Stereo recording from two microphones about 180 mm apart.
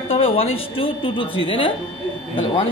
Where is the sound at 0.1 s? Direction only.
30° left (ahead or behind).